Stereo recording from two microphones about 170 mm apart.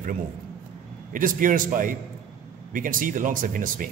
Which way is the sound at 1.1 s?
50° right (ahead or behind).